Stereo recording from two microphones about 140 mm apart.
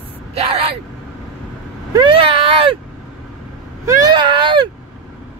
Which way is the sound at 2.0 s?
35° right (ahead or behind).